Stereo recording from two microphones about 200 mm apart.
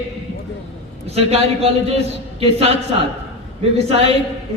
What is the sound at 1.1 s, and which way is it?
A man's voice, 30° right (ahead or behind).